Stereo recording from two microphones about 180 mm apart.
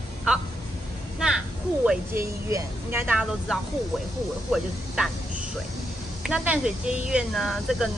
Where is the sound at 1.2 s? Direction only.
5° right (ahead or behind).